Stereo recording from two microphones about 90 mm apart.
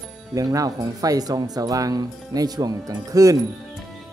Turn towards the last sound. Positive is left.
turn(degrees=-40)  # may be behind; listen again after turning